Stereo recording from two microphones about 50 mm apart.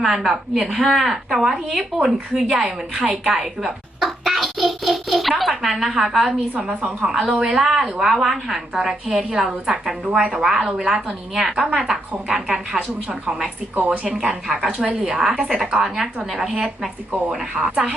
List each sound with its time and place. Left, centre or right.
0.0 s a woman's voice: centre
4.2 s a sound: centre
5.4 s a woman's voice: centre
7.3 s a woman's voice: right
7.5 s a woman's voice: centre
10.1 s a woman's voice: right
10.3 s a woman's voice: centre
13.7 s a woman's voice: right
14.7 s a woman's voice: centre